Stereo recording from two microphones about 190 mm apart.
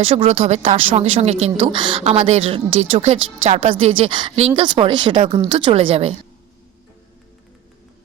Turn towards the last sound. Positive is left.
turn(degrees=-30)  # may be behind; listen again after turning